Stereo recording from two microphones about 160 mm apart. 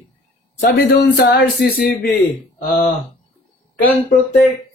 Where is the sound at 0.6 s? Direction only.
65° left (ahead or behind); by 1.8 s 80° left.